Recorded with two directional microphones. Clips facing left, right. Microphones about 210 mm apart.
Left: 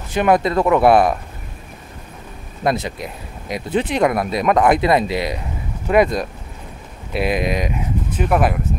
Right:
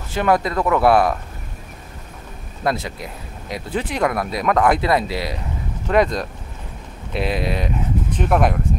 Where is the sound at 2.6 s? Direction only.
20° left (ahead or behind).